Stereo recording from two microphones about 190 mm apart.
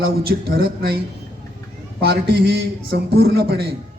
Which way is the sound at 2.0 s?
55° right (ahead or behind).